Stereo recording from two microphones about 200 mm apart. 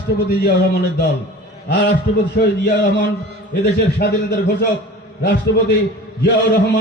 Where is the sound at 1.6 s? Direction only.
60° left (ahead or behind).